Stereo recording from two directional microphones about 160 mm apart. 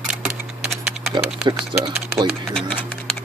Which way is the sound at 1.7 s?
30° right (ahead or behind).